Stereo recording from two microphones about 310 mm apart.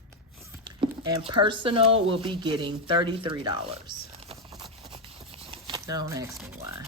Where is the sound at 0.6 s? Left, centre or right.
Centre.